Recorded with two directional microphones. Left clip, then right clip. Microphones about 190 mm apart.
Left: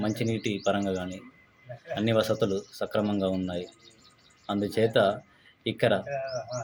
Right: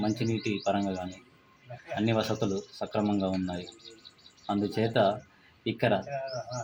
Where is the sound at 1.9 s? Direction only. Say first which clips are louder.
Left 3 dB; 15° left (ahead or behind).